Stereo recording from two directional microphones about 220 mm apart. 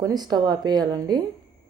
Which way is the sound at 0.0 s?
20° right (ahead or behind).